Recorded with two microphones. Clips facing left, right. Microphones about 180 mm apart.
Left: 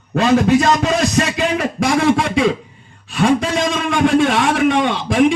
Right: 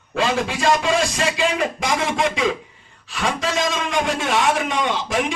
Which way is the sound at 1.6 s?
65° left (ahead or behind).